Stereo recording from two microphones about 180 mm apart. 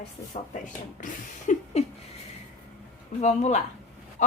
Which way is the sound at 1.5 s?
45° left (ahead or behind).